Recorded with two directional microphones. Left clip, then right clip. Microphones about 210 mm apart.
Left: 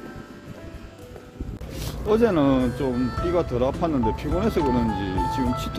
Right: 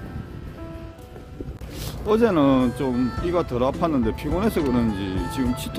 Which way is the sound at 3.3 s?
20° right (ahead or behind).